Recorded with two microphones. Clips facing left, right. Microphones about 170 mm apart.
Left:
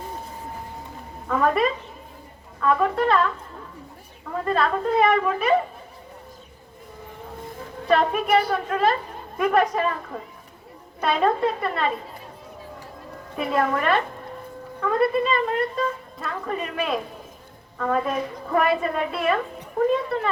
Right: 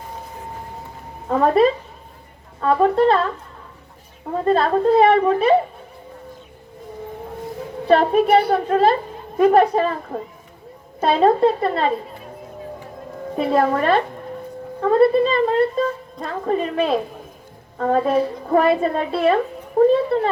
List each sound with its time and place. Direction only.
1.3 s a woman's voice: 30° right (ahead or behind)
4.4 s a woman's voice: 30° right (ahead or behind)
7.9 s a woman's voice: 30° right (ahead or behind)
13.3 s a woman's voice: 30° right (ahead or behind)